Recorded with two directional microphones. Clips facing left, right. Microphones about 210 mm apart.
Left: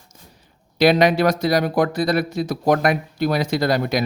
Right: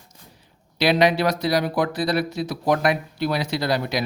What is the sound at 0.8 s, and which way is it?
Speech, 45° left (ahead or behind).